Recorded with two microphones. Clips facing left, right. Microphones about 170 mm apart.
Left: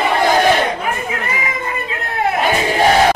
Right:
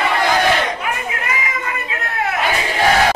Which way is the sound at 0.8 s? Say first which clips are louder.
Left 2 dB; 30° left (ahead or behind).